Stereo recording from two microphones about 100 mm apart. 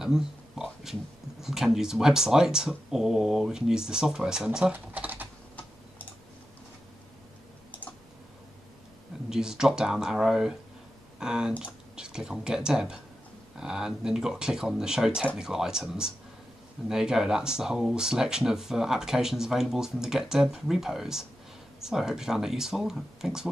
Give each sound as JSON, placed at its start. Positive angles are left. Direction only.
{"t": 0.0, "sound": "a sound", "side_deg": -5}
{"t": 1.4, "sound": "speech", "side_deg": -5}
{"t": 4.7, "sound": "speech", "side_deg": -15}
{"t": 9.3, "sound": "speech", "side_deg": -5}